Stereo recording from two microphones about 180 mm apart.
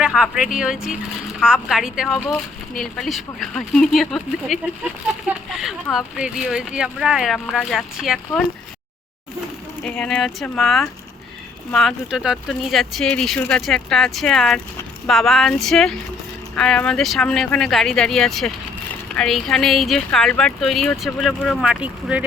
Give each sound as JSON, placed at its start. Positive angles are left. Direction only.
{"t": 0.0, "sound": "speech", "side_deg": -5}
{"t": 9.8, "sound": "speech", "side_deg": 5}